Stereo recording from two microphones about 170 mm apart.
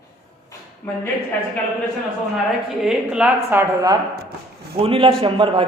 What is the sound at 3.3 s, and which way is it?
Speech, 15° right (ahead or behind).